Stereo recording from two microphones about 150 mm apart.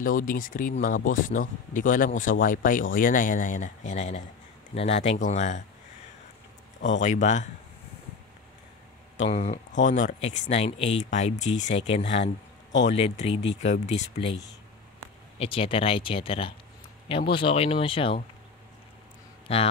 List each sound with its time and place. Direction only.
0.0 s speech: 65° left (ahead or behind)
7.0 s speech: 55° left (ahead or behind)
9.1 s speech: 45° left (ahead or behind)
15.3 s speech: 40° left (ahead or behind)
19.4 s speech: 40° left (ahead or behind)